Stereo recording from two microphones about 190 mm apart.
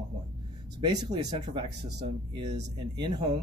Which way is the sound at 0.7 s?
25° right (ahead or behind).